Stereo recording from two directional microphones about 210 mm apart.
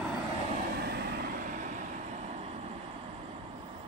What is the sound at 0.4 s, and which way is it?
Vehicle, 40° right (ahead or behind).